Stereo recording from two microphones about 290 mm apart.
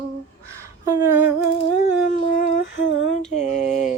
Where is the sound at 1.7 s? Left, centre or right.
Left.